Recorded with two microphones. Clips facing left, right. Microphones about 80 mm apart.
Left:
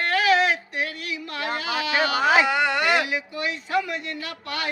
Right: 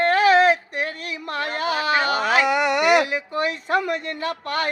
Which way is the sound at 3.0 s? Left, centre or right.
Right.